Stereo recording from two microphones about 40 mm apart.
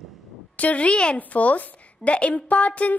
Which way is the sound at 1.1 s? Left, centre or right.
Left.